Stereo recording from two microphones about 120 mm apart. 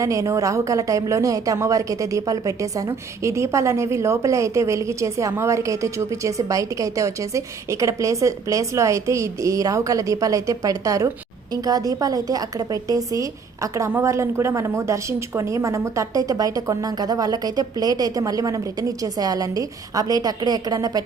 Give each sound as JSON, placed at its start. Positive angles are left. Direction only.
{"t": 0.0, "sound": "speech", "side_deg": -25}